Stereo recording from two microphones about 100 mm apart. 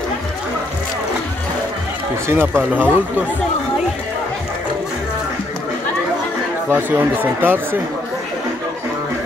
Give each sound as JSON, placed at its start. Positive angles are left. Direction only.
{"t": 2.2, "sound": "speech", "side_deg": -25}
{"t": 6.7, "sound": "speech", "side_deg": -20}